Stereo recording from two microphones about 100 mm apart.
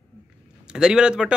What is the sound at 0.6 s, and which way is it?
Speech, 5° right (ahead or behind).